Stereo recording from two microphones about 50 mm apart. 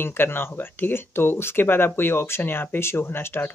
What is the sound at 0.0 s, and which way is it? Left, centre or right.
Speech, left.